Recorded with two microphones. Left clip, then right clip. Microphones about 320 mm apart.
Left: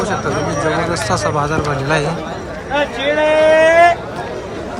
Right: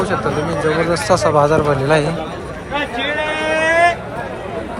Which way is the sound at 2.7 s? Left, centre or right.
Left.